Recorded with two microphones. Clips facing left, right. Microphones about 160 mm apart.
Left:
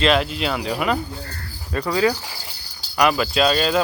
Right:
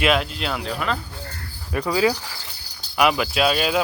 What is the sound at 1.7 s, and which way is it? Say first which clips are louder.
Speech: even; 10° right (ahead or behind).